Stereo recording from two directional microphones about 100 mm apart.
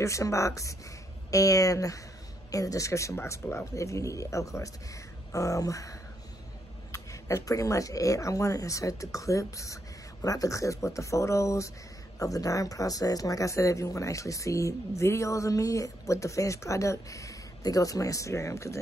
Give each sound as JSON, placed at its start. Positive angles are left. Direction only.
{"t": 0.0, "sound": "speech", "side_deg": 30}